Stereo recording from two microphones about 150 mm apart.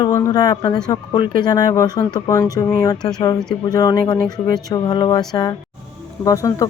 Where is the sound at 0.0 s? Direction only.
25° left (ahead or behind).